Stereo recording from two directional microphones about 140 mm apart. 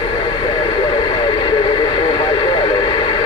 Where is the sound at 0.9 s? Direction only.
40° left (ahead or behind).